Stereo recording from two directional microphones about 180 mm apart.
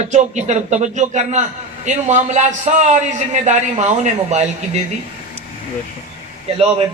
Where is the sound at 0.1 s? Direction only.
40° right (ahead or behind).